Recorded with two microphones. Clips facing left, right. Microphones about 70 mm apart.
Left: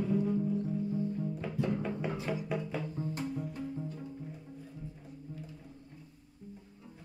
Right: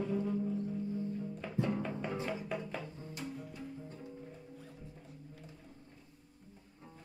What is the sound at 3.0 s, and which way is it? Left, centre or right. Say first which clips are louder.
Music: left 11 dB; left.